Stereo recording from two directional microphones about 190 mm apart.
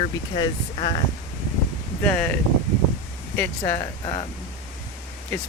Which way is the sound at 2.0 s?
10° left (ahead or behind).